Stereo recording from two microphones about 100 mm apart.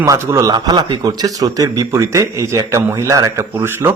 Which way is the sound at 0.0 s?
35° right (ahead or behind).